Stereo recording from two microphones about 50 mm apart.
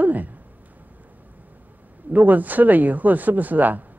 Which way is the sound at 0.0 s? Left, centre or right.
Right.